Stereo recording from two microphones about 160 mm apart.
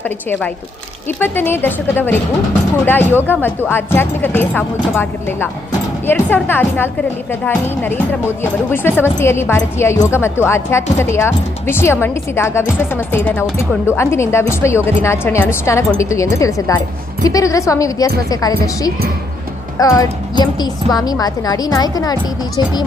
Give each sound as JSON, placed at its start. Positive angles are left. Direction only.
{"t": 1.2, "sound": "a woman's voice", "side_deg": 15}
{"t": 19.8, "sound": "a woman's voice", "side_deg": 20}